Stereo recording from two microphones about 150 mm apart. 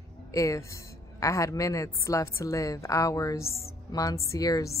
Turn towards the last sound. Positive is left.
turn(degrees=20)  # may be behind; listen again after turning